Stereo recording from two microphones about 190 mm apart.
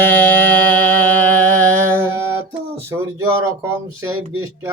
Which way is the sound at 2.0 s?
15° right (ahead or behind).